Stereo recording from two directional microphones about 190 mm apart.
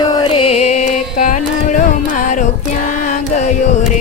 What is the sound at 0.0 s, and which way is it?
Music, 20° left (ahead or behind).